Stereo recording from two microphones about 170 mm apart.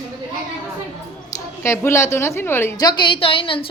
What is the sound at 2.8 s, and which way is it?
Speech, 25° left (ahead or behind).